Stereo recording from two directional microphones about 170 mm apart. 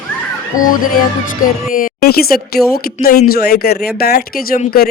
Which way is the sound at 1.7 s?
60° left (ahead or behind).